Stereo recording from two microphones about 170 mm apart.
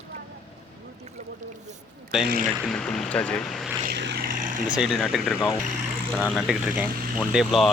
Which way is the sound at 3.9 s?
80° right.